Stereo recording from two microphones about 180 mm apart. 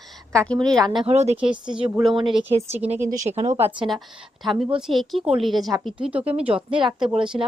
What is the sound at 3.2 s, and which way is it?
Speech, 40° right (ahead or behind).